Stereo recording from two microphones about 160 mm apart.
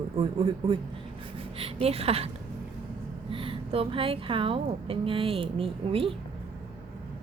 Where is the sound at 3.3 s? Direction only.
35° right (ahead or behind).